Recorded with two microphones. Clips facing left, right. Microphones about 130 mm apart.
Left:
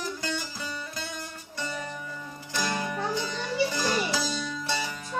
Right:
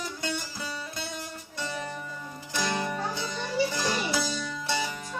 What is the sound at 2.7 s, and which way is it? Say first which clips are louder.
Music: right 2 dB; 10° right (ahead or behind).